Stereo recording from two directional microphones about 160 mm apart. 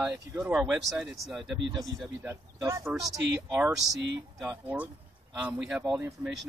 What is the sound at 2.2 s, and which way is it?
Speech, 15° right (ahead or behind).